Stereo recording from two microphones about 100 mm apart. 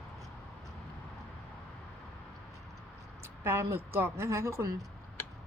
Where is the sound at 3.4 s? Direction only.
25° right (ahead or behind).